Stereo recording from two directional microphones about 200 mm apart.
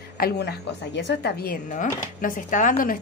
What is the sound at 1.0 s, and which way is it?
A woman's voice, 60° left (ahead or behind).